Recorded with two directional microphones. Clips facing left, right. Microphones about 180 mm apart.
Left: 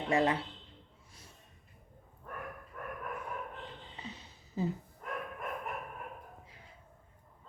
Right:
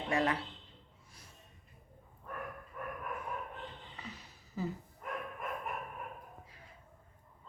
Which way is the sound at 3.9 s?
25° left (ahead or behind).